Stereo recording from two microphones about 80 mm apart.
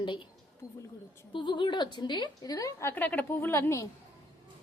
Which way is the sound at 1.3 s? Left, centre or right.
Left.